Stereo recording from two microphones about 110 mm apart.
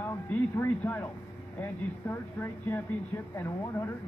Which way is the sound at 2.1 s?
20° left (ahead or behind).